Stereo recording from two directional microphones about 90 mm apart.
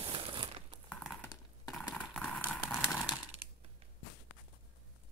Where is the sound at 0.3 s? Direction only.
65° right (ahead or behind).